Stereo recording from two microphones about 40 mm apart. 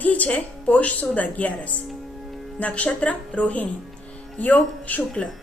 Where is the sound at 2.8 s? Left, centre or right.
Left.